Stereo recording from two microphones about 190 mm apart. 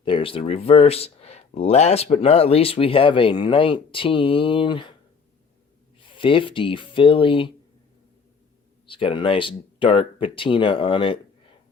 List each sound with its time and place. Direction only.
0.0 s speech: 25° left (ahead or behind)
6.0 s speech: 25° left (ahead or behind)
8.9 s speech: 25° left (ahead or behind)